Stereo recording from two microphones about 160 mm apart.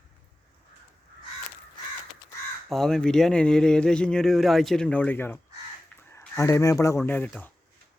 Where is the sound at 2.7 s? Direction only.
5° left (ahead or behind).